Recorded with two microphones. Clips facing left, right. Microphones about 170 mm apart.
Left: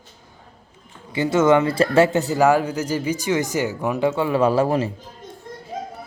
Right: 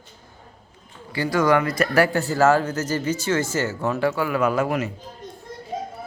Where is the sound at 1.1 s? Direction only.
20° left (ahead or behind).